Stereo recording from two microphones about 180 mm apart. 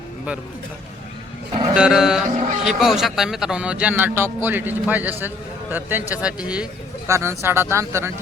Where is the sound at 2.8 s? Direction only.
Centre (ahead or behind).